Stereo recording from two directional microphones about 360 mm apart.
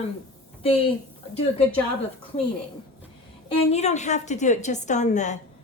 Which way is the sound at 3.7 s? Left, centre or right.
Centre.